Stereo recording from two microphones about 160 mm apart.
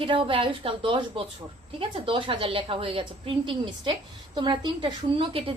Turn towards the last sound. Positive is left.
turn(degrees=-35)  # may be behind; listen again after turning